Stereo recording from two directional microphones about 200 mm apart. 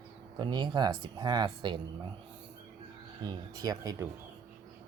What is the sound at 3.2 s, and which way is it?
Speech, 20° right (ahead or behind).